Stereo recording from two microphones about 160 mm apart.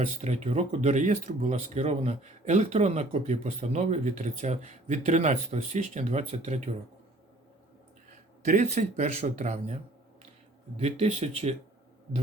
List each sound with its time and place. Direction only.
0.2 s speech: 45° right (ahead or behind)
8.4 s speech: 45° right (ahead or behind)
10.8 s speech: 40° right (ahead or behind)